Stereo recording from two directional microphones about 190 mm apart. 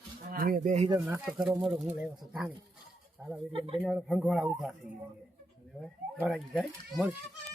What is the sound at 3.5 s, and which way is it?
Speech, 25° right (ahead or behind).